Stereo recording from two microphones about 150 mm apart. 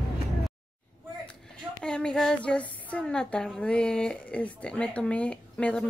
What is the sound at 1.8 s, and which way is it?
A woman's voice, 5° left (ahead or behind).